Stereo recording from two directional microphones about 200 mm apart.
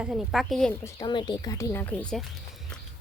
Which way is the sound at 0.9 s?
20° left (ahead or behind).